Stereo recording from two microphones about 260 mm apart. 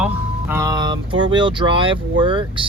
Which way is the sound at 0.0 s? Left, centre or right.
Centre.